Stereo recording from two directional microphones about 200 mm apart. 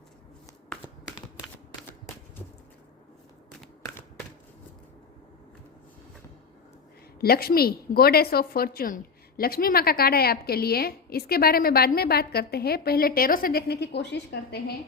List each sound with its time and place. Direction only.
7.2 s a woman's voice: 50° left (ahead or behind)